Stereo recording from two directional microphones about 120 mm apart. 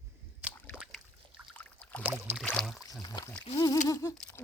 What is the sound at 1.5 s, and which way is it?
Rowboat, 10° left (ahead or behind).